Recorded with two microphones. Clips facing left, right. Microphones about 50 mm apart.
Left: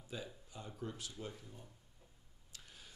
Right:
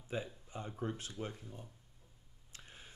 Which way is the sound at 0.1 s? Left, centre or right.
Right.